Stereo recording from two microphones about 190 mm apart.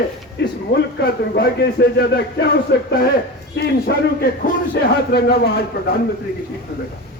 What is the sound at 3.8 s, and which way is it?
Speech, 55° left (ahead or behind).